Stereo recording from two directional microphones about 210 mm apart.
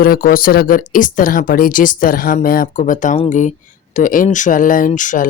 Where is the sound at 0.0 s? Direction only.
45° left (ahead or behind).